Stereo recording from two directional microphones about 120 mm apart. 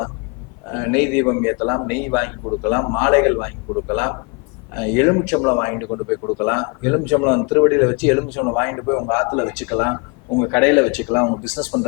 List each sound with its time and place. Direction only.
0.7 s a man's voice: 15° left (ahead or behind)
11.4 s a man's voice: 5° left (ahead or behind)